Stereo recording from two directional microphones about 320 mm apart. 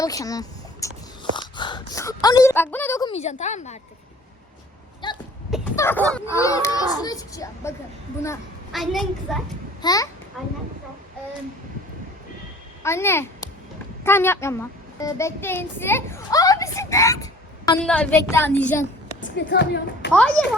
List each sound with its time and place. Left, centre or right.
0.0 s speech: centre
5.0 s a child's voice: centre
9.8 s a child's voice: centre
10.4 s a child's voice: centre
12.8 s a child's voice: centre
19.5 s speech: left
20.4 s a child's voice: centre